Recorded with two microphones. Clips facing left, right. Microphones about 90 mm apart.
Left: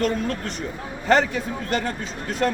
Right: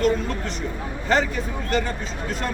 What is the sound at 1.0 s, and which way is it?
Speech, 55° left (ahead or behind).